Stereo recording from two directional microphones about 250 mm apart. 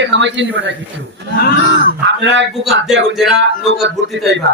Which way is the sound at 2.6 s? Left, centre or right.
Centre.